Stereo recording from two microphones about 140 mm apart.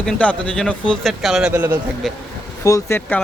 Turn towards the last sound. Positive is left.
turn(degrees=10)  # may be behind; listen again after turning